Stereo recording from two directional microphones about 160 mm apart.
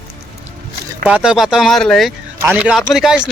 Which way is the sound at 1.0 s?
5° right (ahead or behind).